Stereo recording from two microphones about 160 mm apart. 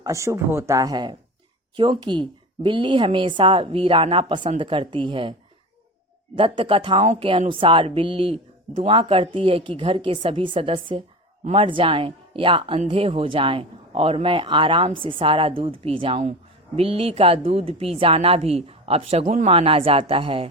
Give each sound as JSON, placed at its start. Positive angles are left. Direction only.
{"t": 0.0, "sound": "speech", "side_deg": -20}
{"t": 6.3, "sound": "speech", "side_deg": -30}
{"t": 19.2, "sound": "speech", "side_deg": -50}
{"t": 19.5, "sound": "speech", "side_deg": -35}